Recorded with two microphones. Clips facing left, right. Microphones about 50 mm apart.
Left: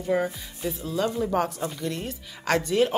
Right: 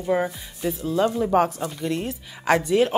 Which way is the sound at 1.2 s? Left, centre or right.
Right.